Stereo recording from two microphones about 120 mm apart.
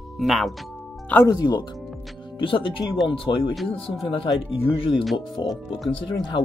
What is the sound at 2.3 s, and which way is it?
Speech, 45° left (ahead or behind).